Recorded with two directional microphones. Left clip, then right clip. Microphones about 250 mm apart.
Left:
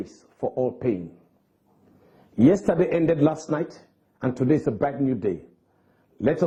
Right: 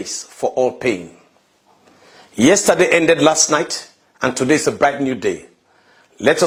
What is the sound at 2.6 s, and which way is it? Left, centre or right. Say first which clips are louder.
Speech: right 9 dB; centre.